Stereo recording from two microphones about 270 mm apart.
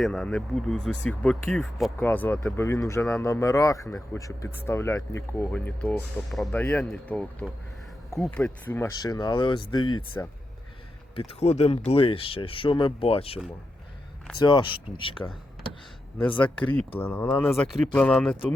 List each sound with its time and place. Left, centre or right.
0.0 s speech: centre
11.1 s speech: left
16.4 s speech: centre